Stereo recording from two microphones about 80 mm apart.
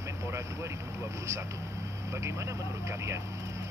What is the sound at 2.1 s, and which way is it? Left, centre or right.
Speech, right.